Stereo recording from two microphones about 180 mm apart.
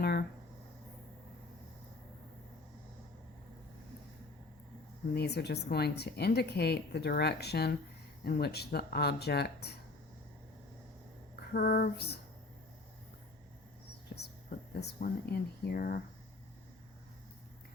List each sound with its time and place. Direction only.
0.0 s a sound: 60° left (ahead or behind)
5.1 s a woman's voice: 65° left (ahead or behind)
11.5 s a woman's voice: 55° left (ahead or behind)
14.7 s a woman's voice: 65° left (ahead or behind)